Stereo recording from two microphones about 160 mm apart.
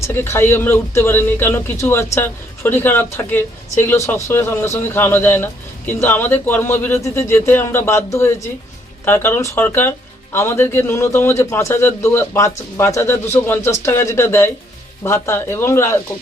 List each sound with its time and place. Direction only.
0.0 s speech: 15° left (ahead or behind)